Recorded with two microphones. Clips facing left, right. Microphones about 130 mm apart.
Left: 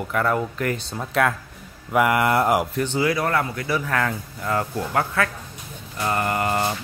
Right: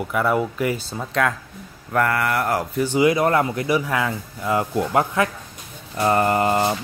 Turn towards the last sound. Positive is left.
turn(degrees=-25)  # may be behind; listen again after turning